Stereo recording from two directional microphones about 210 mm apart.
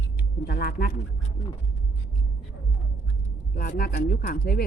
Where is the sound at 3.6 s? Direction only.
45° left (ahead or behind).